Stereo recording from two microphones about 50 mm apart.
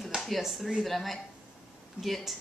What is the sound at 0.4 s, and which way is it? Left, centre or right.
A woman's voice, centre.